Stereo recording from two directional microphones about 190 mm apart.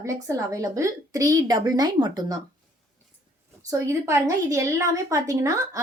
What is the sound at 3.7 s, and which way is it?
A woman's voice, 15° right (ahead or behind).